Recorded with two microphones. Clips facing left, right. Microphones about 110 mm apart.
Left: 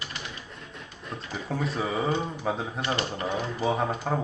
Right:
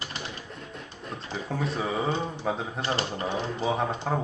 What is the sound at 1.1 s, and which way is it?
Speech, centre (ahead or behind).